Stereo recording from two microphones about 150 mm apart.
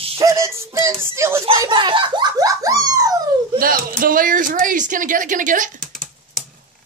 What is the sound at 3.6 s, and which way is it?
Speech, 75° right (ahead or behind).